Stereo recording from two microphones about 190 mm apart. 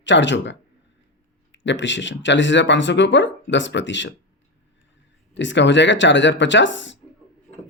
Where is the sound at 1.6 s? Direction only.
70° left (ahead or behind).